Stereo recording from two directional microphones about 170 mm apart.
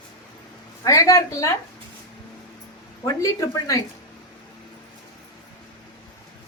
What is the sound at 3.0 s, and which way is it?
Speech, 20° left (ahead or behind).